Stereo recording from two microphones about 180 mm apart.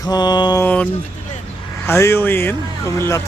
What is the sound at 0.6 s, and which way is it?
Mantra, 10° left (ahead or behind).